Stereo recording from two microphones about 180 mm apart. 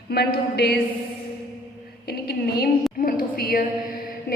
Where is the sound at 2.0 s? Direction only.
60° left (ahead or behind).